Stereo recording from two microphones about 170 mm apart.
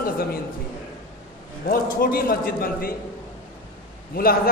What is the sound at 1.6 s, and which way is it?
A man's voice, 60° left (ahead or behind).